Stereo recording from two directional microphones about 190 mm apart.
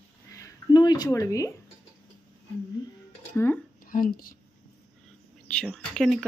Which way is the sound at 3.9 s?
50° left (ahead or behind).